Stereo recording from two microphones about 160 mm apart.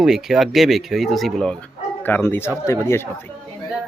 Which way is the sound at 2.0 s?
10° left (ahead or behind).